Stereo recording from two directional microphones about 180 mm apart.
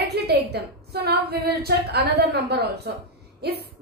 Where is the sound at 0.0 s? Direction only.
65° right (ahead or behind).